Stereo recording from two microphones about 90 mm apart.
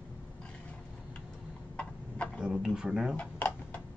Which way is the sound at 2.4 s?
5° right (ahead or behind).